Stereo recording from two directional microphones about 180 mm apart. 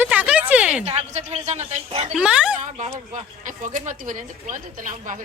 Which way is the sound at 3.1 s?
45° right (ahead or behind).